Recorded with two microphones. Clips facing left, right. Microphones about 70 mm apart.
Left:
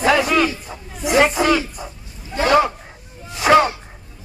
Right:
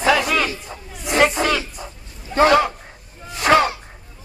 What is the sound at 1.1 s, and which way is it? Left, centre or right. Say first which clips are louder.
Crowd: left 2 dB; centre.